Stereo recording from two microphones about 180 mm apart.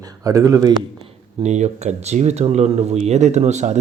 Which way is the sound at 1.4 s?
40° right (ahead or behind).